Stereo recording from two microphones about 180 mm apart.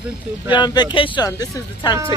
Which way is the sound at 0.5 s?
25° left (ahead or behind).